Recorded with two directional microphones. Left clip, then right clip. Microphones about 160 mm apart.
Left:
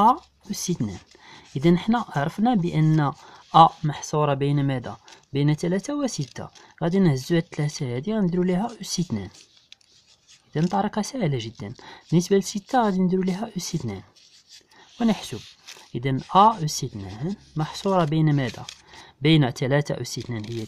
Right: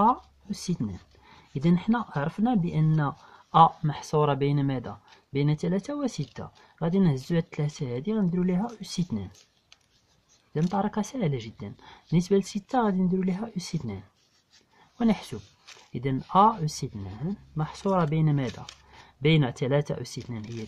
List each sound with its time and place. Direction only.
0.0 s speech: 45° left (ahead or behind)
3.8 s speech: 30° left (ahead or behind)
10.7 s speech: 40° left (ahead or behind)